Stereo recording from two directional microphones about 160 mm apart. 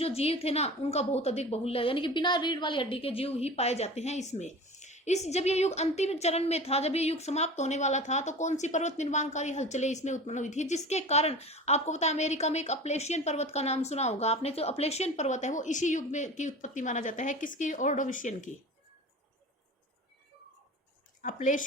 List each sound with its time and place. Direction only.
0.0 s a woman's voice: 40° left (ahead or behind)
21.2 s a woman's voice: 50° left (ahead or behind)